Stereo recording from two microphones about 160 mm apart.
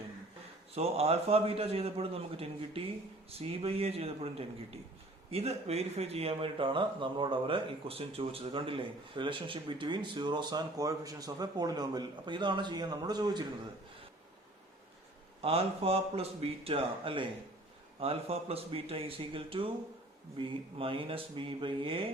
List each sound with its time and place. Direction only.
0.7 s a man's voice: 40° right (ahead or behind)
15.4 s a man's voice: 40° right (ahead or behind)